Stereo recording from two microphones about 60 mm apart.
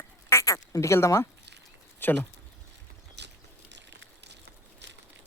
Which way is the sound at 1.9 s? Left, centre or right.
Left.